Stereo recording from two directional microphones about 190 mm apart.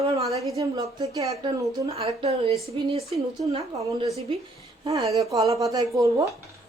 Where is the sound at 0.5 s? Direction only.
20° right (ahead or behind).